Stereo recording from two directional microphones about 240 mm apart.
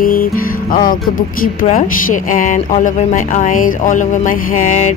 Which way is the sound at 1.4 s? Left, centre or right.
Left.